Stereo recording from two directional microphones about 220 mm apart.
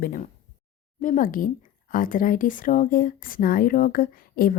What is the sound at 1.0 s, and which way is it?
Speech, 35° left (ahead or behind).